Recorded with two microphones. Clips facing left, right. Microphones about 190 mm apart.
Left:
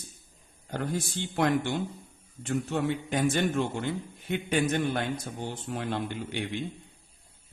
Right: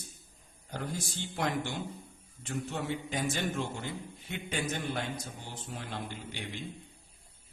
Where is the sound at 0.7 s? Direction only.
60° left (ahead or behind).